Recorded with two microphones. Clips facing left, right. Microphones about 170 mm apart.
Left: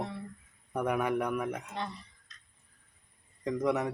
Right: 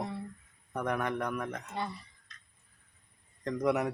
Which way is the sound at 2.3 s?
60° right (ahead or behind).